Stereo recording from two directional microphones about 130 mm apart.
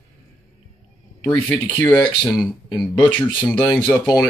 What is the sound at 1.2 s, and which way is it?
Speech, 10° left (ahead or behind).